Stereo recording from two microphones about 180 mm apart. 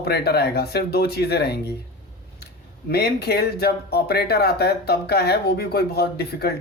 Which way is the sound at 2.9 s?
60° left (ahead or behind).